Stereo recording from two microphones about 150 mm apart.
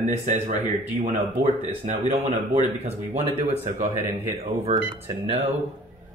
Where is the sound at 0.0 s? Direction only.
50° right (ahead or behind).